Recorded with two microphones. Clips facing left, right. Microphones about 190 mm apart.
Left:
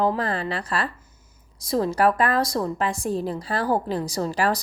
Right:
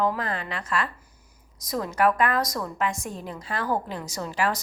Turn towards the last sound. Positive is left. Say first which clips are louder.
# left 4 dB
turn(degrees=35)  # may be behind; listen again after turning